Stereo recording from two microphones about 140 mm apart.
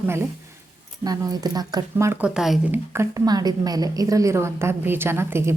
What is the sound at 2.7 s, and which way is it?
A woman's voice, 20° right (ahead or behind).